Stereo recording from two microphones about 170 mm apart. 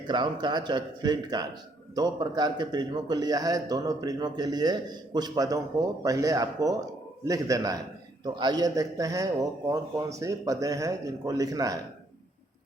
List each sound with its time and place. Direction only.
0.1 s a man's voice: 25° right (ahead or behind)